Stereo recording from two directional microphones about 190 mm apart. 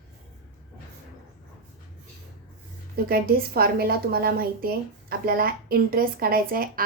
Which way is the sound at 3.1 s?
50° right (ahead or behind).